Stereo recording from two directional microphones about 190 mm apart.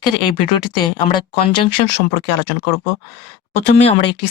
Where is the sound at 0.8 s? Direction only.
25° left (ahead or behind).